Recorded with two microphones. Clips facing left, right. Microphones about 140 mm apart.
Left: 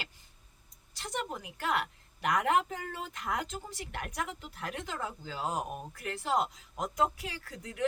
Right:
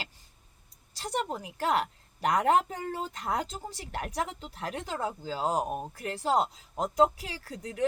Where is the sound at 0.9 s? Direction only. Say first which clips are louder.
Right 5 dB; 35° right (ahead or behind).